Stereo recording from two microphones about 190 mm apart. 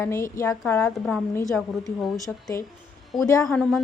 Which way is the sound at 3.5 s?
5° left (ahead or behind).